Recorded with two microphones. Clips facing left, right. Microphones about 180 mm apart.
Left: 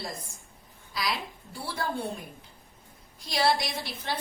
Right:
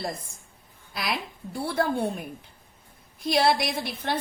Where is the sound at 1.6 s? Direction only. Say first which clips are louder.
Right 7 dB; 55° right (ahead or behind).